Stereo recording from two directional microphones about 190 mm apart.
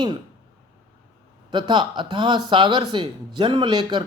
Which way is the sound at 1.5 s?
25° right (ahead or behind).